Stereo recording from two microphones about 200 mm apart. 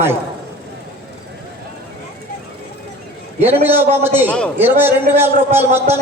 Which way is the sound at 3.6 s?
10° right (ahead or behind).